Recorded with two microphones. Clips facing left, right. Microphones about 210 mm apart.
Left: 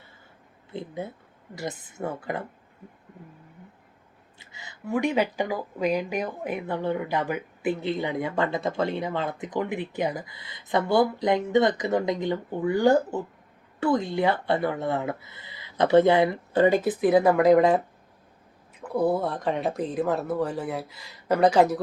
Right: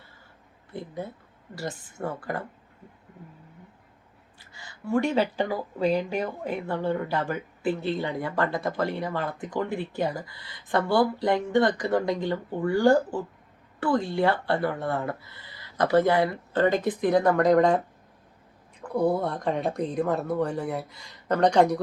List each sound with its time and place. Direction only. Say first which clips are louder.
0.7 s speech: left 1 dB; 20° left (ahead or behind)
2.0 s speech: left 1 dB; 5° left (ahead or behind)
4.5 s speech: right 2 dB; 20° left (ahead or behind)
18.8 s speech: even; 5° left (ahead or behind)